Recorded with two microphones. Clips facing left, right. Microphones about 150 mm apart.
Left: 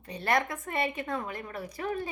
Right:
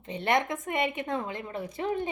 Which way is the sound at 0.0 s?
20° right (ahead or behind).